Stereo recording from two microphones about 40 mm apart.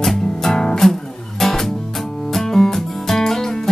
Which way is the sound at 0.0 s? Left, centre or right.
Centre.